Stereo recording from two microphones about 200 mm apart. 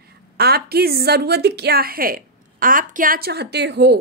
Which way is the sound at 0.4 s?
50° right (ahead or behind).